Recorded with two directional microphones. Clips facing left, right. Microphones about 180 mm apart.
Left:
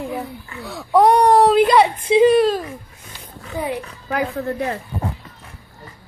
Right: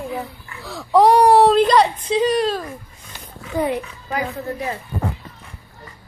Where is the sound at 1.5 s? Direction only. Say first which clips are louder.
Left 1 dB; 5° left (ahead or behind).